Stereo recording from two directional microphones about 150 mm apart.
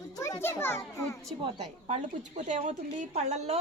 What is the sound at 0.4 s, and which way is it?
Speech, 15° left (ahead or behind).